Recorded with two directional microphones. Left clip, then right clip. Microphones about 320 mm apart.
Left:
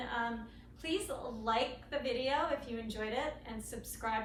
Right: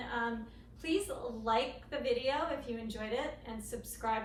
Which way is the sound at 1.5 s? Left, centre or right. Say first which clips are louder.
Right 1 dB; centre.